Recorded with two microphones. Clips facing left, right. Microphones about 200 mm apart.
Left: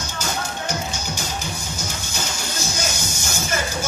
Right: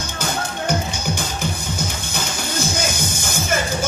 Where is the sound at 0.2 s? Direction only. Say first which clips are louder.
Right 3 dB; 55° right (ahead or behind).